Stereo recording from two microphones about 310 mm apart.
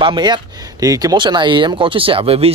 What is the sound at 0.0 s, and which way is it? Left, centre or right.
Speech, centre.